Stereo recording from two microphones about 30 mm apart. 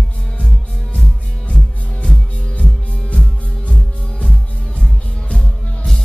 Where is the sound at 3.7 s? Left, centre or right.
Left.